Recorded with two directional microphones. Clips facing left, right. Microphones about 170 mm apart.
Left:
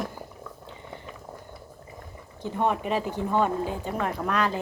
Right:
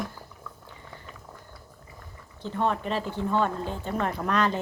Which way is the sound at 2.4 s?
15° left (ahead or behind).